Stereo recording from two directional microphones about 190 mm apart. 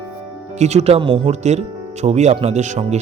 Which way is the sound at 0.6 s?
35° right (ahead or behind).